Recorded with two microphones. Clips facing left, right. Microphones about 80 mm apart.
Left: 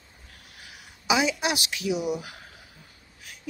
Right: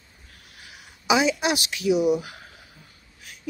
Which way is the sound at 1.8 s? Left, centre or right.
Centre.